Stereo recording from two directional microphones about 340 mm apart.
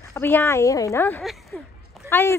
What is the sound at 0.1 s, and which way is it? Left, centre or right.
Speech, centre.